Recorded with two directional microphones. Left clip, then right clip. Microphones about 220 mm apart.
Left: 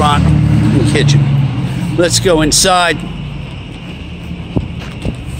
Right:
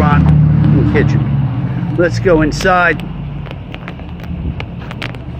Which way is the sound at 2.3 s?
15° left (ahead or behind).